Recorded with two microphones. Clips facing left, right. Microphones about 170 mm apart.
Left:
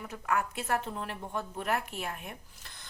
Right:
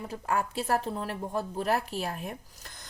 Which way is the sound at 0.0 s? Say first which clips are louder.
Right 2 dB; 30° right (ahead or behind).